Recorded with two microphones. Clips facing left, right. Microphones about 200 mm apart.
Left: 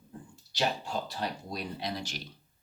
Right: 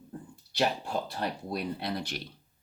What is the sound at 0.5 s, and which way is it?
Speech, 55° right (ahead or behind).